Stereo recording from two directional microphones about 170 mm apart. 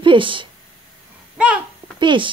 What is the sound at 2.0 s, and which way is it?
Speech, 30° right (ahead or behind).